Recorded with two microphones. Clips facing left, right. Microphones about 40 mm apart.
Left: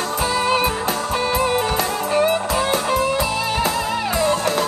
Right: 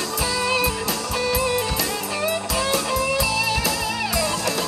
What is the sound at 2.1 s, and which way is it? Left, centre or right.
Music, left.